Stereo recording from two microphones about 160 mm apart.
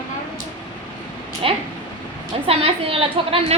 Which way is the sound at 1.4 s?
35° right (ahead or behind).